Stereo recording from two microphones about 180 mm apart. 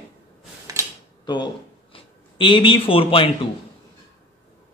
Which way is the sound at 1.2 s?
25° left (ahead or behind).